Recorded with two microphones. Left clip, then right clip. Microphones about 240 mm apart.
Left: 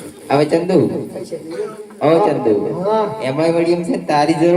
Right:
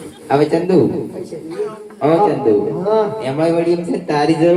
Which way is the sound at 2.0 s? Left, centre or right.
Left.